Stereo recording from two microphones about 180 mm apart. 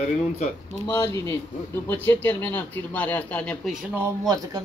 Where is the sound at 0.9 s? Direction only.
15° left (ahead or behind).